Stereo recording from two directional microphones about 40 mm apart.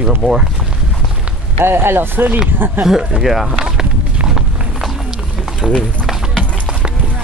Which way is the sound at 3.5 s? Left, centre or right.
Centre.